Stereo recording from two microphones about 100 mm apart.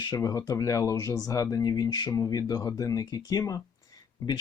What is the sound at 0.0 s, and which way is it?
Speech, 40° left (ahead or behind).